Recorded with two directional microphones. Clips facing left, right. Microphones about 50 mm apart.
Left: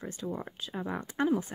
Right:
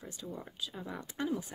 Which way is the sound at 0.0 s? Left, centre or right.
Left.